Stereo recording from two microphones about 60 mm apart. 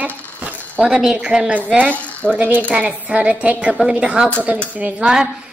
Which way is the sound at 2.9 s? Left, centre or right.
Right.